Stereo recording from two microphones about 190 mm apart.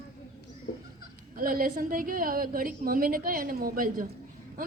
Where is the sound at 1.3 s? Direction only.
50° right (ahead or behind).